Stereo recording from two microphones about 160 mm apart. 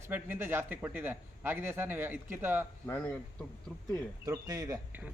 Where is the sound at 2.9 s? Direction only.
10° left (ahead or behind).